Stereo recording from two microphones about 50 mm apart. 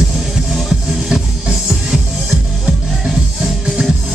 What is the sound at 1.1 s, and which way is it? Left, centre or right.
Music, centre.